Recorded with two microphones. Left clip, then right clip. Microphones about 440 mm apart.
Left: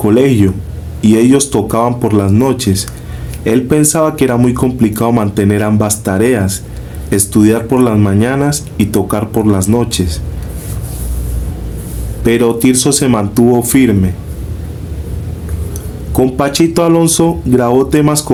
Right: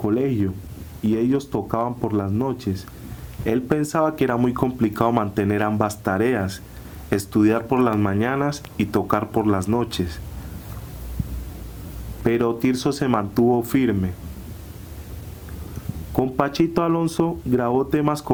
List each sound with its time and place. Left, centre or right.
0.1 s speech: right
12.2 s speech: right
16.4 s speech: right